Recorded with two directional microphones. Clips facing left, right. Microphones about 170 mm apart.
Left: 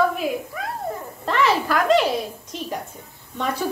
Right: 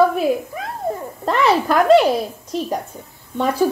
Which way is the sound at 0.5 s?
25° right (ahead or behind).